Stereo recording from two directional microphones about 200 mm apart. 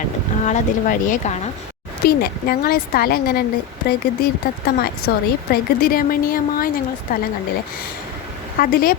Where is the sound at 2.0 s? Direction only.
50° left (ahead or behind).